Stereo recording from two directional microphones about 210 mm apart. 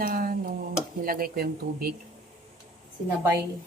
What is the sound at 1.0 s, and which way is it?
Speech, 45° right (ahead or behind).